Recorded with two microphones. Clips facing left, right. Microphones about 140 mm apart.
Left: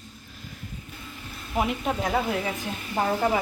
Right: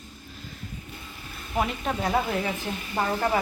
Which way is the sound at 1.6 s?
10° left (ahead or behind).